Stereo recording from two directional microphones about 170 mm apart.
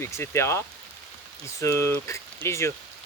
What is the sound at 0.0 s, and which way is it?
Speech, 15° left (ahead or behind).